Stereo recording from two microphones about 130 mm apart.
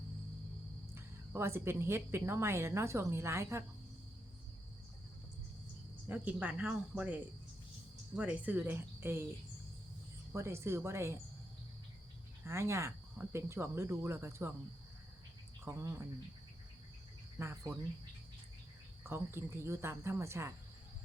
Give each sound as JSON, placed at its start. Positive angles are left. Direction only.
{"t": 0.9, "sound": "a woman's voice", "side_deg": -20}
{"t": 6.1, "sound": "speech", "side_deg": -10}
{"t": 10.3, "sound": "a woman's voice", "side_deg": -20}
{"t": 12.5, "sound": "a woman's voice", "side_deg": -20}
{"t": 15.6, "sound": "a woman's voice", "side_deg": -20}
{"t": 17.3, "sound": "cricket", "side_deg": -20}
{"t": 19.0, "sound": "a woman's voice", "side_deg": -20}